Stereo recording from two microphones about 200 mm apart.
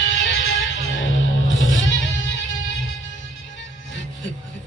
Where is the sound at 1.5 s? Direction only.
75° left (ahead or behind).